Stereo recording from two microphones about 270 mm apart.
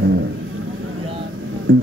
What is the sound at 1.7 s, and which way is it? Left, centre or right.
Music, right.